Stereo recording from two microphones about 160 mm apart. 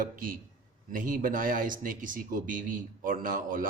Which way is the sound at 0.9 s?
55° right (ahead or behind).